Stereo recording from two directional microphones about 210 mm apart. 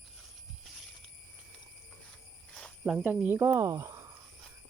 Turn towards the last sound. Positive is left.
turn(degrees=-15)  # may be behind; listen again after turning